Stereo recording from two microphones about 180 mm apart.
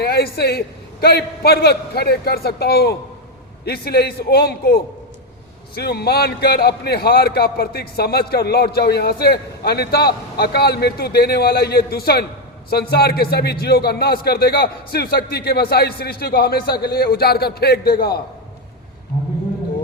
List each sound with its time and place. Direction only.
0.0 s a man's voice: 60° left (ahead or behind)